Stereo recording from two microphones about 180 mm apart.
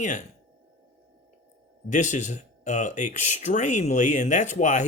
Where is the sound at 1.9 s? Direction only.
45° left (ahead or behind).